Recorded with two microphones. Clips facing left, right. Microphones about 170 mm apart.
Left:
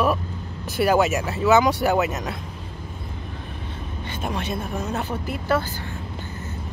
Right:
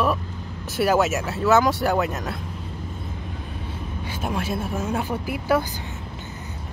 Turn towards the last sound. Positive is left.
turn(degrees=-10)  # may be behind; listen again after turning